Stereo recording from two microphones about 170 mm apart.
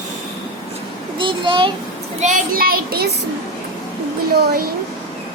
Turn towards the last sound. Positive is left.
turn(degrees=-65)  # may be behind; listen again after turning